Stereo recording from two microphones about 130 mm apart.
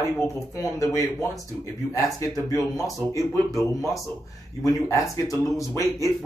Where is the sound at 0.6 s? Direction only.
25° left (ahead or behind).